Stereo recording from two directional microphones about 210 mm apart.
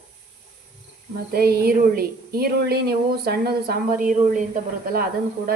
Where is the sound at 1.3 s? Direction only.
45° right (ahead or behind).